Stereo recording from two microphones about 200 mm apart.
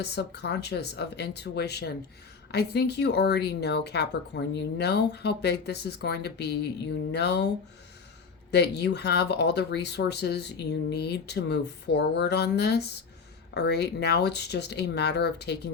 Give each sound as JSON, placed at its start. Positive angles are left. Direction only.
{"t": 0.0, "sound": "speech", "side_deg": 55}